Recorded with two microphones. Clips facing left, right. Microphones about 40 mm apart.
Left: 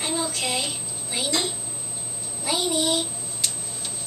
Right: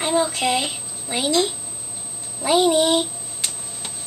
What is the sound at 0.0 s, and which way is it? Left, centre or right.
A child's voice, right.